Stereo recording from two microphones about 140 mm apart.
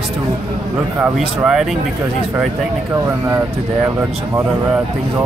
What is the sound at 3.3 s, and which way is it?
Speech, 15° right (ahead or behind).